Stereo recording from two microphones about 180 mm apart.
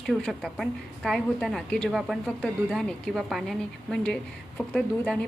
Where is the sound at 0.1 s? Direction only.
Centre (ahead or behind).